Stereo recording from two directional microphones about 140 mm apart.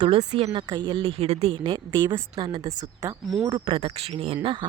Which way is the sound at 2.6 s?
25° right (ahead or behind).